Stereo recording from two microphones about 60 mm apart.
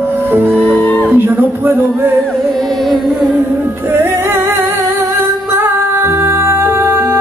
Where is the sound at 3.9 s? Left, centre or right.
Right.